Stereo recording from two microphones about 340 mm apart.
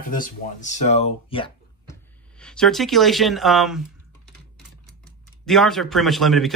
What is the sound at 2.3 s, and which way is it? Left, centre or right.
Speech, centre.